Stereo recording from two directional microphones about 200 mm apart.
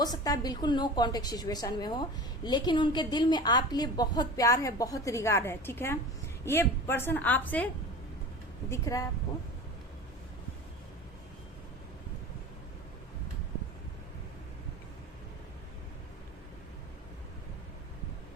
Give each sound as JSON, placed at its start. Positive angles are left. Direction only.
{"t": 0.0, "sound": "a woman's voice", "side_deg": 20}
{"t": 8.7, "sound": "a woman's voice", "side_deg": 15}